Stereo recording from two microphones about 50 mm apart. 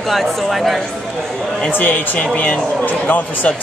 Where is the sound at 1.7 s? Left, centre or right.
Left.